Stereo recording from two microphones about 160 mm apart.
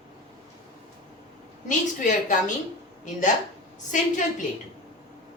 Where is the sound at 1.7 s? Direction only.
50° left (ahead or behind).